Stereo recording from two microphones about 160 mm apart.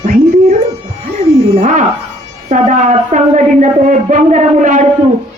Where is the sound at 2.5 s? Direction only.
50° right (ahead or behind).